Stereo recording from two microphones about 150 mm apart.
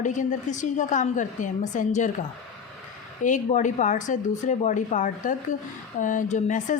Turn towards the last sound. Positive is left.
turn(degrees=55)  # may be behind; listen again after turning